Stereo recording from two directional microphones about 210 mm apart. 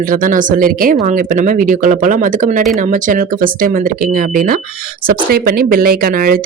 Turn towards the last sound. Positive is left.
turn(degrees=-45)  # may be behind; listen again after turning